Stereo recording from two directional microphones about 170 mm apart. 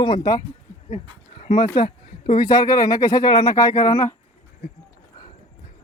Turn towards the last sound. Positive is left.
turn(degrees=20)  # may be behind; listen again after turning